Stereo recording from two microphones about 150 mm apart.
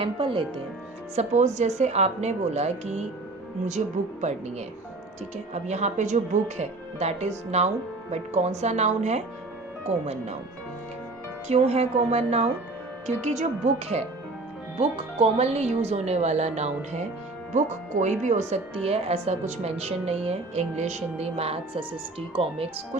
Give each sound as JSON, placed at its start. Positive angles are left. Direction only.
{"t": 0.0, "sound": "speech", "side_deg": -35}
{"t": 1.1, "sound": "a woman's voice", "side_deg": -50}
{"t": 5.6, "sound": "a woman's voice", "side_deg": -50}
{"t": 11.4, "sound": "a woman's voice", "side_deg": -45}
{"t": 18.0, "sound": "a woman's voice", "side_deg": -50}